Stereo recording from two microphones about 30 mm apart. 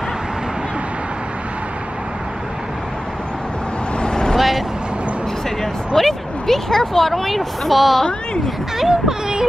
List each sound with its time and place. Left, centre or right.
4.0 s vehicle: left
4.4 s vehicle: centre
5.9 s a sound: centre
7.1 s a woman's voice: centre
8.7 s speech: centre